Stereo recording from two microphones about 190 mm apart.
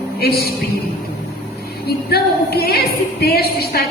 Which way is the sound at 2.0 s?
55° left (ahead or behind).